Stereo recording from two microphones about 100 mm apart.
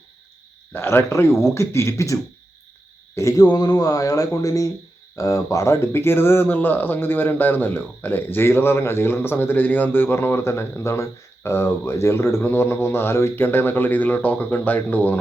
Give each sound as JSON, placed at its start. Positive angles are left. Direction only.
{"t": 0.7, "sound": "speech", "side_deg": 20}
{"t": 3.2, "sound": "speech", "side_deg": 35}